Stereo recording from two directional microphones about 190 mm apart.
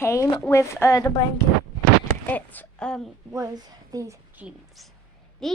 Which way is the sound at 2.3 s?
10° left (ahead or behind).